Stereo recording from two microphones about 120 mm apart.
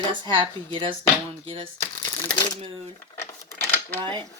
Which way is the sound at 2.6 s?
55° right (ahead or behind).